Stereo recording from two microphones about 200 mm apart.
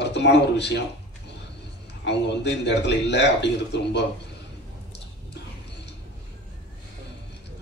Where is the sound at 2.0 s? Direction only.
60° left (ahead or behind).